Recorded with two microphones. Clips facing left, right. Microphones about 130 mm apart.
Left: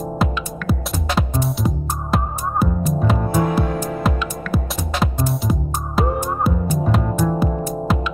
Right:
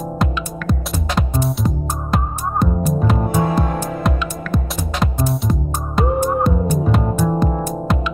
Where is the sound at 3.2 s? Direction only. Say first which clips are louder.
Right 1 dB; 25° right (ahead or behind).